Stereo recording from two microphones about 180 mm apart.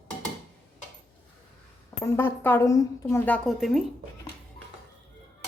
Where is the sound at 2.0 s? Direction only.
10° left (ahead or behind).